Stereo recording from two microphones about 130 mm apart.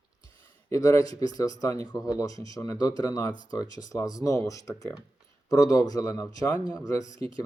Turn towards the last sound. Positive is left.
turn(degrees=-40)  # may be behind; listen again after turning